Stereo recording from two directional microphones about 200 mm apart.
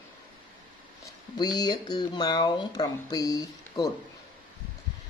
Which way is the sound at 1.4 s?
20° left (ahead or behind).